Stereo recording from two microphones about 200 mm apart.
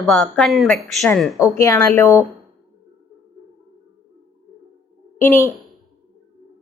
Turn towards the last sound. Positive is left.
turn(degrees=10)  # may be behind; listen again after turning